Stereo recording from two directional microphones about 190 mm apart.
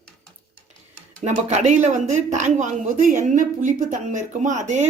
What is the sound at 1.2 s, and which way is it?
A woman's voice, 40° right (ahead or behind).